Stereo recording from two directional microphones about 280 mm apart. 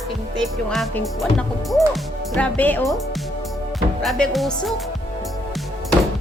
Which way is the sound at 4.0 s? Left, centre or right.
Centre.